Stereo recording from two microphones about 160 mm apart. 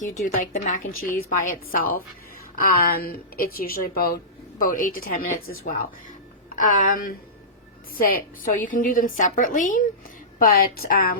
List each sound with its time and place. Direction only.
0.0 s a woman's voice: 55° left (ahead or behind)